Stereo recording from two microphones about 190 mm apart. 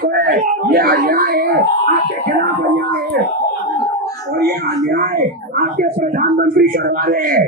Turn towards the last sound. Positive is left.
turn(degrees=-50)  # may be behind; listen again after turning